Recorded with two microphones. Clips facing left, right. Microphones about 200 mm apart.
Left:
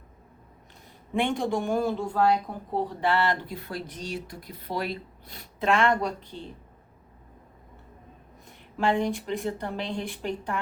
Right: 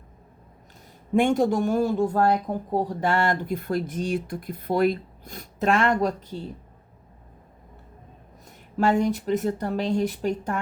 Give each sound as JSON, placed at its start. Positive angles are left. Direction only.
{"t": 1.1, "sound": "speech", "side_deg": -45}
{"t": 8.8, "sound": "speech", "side_deg": -45}